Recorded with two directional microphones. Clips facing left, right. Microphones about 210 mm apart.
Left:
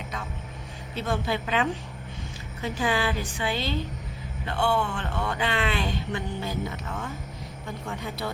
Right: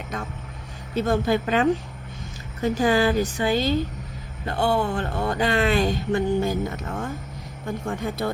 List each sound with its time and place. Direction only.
0.9 s speech: 45° right (ahead or behind)